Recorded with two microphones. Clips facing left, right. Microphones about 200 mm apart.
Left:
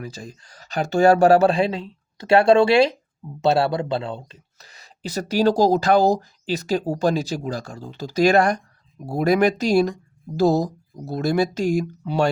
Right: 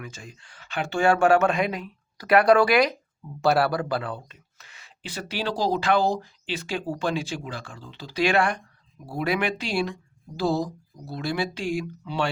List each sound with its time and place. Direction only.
0.0 s speech: 35° left (ahead or behind)